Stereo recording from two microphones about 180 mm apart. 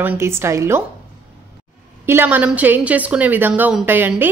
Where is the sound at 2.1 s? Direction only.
10° right (ahead or behind).